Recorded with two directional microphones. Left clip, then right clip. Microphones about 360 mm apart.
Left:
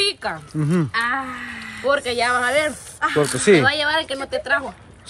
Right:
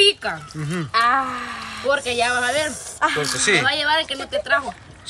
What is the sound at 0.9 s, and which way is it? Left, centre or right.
Speech, centre.